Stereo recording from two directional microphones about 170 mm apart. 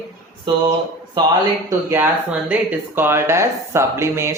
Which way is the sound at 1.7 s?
15° right (ahead or behind).